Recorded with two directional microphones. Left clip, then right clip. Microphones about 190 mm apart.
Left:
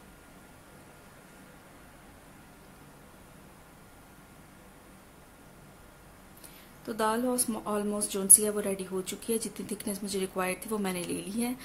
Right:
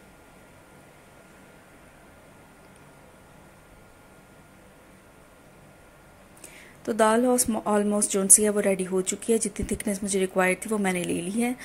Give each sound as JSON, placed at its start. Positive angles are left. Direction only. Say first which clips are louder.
{"t": 6.9, "sound": "a woman's voice", "louder": "right 8 dB", "side_deg": -20}